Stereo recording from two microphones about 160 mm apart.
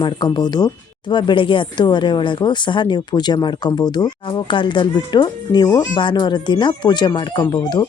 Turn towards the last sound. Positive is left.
turn(degrees=30)  # may be behind; listen again after turning